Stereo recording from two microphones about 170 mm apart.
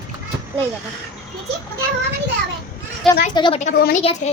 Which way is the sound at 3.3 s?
25° left (ahead or behind).